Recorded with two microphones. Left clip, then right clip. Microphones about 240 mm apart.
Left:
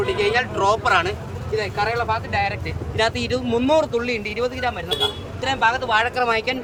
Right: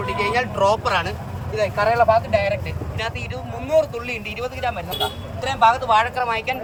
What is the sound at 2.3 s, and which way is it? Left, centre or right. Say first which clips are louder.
Speech: right 3 dB; centre.